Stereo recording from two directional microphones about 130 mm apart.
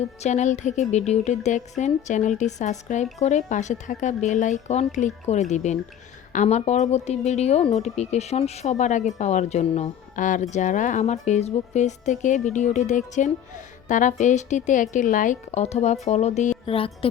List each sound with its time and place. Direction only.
0.2 s a woman's voice: 65° left (ahead or behind)
16.6 s speech: 45° left (ahead or behind)